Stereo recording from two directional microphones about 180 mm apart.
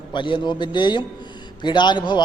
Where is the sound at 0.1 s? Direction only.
25° left (ahead or behind).